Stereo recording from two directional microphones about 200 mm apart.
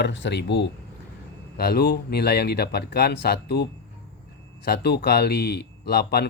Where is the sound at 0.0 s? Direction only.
60° left (ahead or behind).